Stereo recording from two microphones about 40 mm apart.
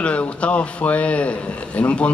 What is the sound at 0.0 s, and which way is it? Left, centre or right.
A man's voice, left.